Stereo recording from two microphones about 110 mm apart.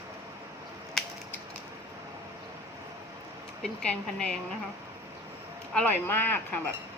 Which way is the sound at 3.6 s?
10° left (ahead or behind).